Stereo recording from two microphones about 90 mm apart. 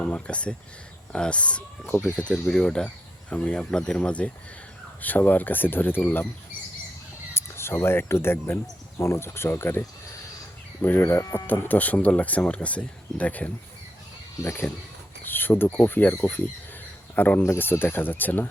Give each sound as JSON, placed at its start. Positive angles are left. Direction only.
{"t": 0.0, "sound": "speech", "side_deg": 15}
{"t": 1.9, "sound": "speech", "side_deg": 25}
{"t": 2.1, "sound": "speech", "side_deg": 10}
{"t": 7.3, "sound": "speech", "side_deg": 25}
{"t": 10.8, "sound": "speech", "side_deg": 25}
{"t": 11.4, "sound": "speech", "side_deg": 20}
{"t": 14.4, "sound": "speech", "side_deg": 30}